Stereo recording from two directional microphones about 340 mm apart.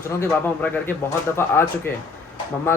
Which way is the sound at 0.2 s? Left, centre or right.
Centre.